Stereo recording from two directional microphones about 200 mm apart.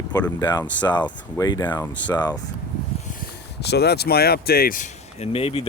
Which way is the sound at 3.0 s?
40° left (ahead or behind).